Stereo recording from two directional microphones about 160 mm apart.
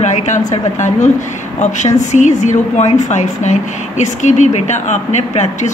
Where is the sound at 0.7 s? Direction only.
50° left (ahead or behind).